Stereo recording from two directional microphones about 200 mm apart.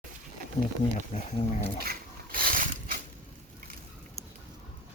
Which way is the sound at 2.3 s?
45° right (ahead or behind).